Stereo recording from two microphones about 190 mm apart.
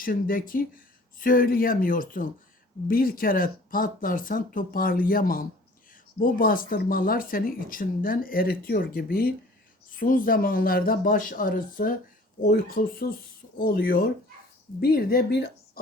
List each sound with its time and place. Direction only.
0.0 s speech: 50° left (ahead or behind)